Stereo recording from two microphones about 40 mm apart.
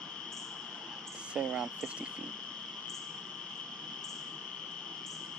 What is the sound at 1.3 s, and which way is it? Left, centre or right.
Frog, right.